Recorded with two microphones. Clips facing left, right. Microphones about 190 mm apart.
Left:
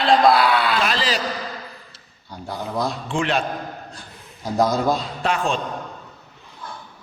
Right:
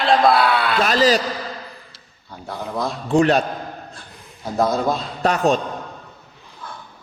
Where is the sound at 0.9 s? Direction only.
40° right (ahead or behind).